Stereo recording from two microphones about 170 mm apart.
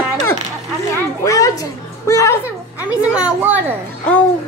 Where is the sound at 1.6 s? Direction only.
20° left (ahead or behind).